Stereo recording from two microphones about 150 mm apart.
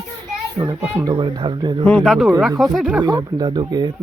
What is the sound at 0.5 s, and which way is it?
A child's voice, 30° right (ahead or behind).